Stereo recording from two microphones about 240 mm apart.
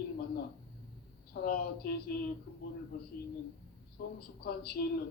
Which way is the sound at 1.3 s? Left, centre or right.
Left.